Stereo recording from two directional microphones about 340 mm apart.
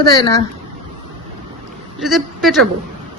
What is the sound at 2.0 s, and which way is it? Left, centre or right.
Speech, centre.